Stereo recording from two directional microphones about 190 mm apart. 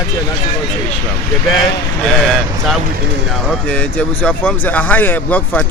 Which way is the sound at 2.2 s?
Centre (ahead or behind).